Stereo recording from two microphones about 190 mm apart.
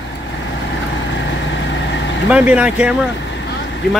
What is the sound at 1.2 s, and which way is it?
Vehicle, 70° left (ahead or behind).